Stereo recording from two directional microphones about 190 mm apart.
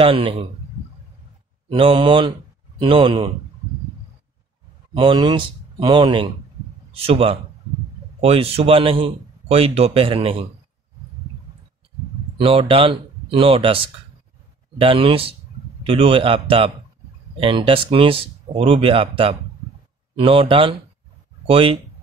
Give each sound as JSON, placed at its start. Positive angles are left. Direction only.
{"t": 0.0, "sound": "speech", "side_deg": -30}
{"t": 1.7, "sound": "speech", "side_deg": -25}
{"t": 4.9, "sound": "a man's voice", "side_deg": -25}
{"t": 12.4, "sound": "speech", "side_deg": -25}
{"t": 14.8, "sound": "speech", "side_deg": -25}